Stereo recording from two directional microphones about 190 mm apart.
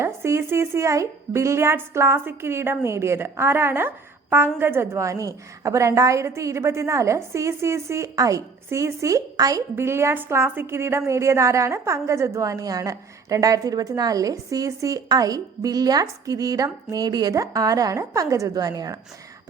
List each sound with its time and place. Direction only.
0.0 s a woman's voice: 15° right (ahead or behind)